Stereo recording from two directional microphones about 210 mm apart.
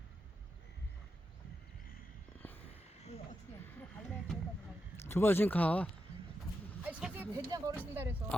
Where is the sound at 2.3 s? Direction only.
10° left (ahead or behind).